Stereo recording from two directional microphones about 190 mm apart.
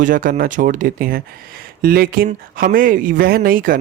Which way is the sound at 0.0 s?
45° right (ahead or behind).